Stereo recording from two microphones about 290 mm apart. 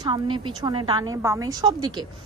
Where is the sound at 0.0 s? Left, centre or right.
Centre.